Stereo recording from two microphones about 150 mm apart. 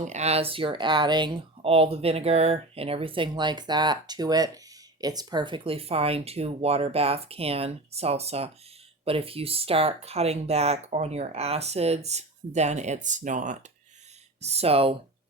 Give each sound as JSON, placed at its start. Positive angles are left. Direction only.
{"t": 0.0, "sound": "speech", "side_deg": -50}
{"t": 14.4, "sound": "speech", "side_deg": -45}